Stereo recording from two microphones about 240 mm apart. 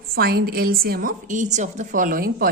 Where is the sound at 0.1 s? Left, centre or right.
Right.